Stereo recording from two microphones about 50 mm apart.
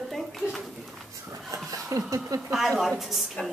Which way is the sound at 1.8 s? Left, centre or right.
Right.